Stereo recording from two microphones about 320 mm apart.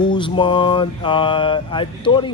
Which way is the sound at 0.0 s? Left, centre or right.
Centre.